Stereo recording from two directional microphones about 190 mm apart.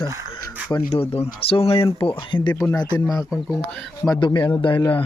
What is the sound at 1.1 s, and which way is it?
Speech, 30° left (ahead or behind).